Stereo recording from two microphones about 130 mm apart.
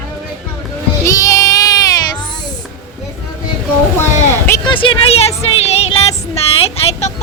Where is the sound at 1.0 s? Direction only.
25° left (ahead or behind).